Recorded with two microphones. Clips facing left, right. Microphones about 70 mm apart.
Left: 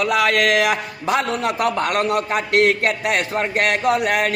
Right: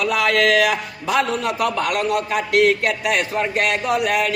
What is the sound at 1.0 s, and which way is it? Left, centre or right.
A man's voice, left.